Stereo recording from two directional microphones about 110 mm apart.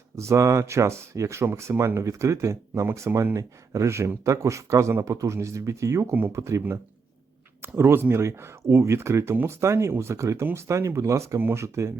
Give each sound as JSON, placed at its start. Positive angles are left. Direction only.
{"t": 0.2, "sound": "speech", "side_deg": -25}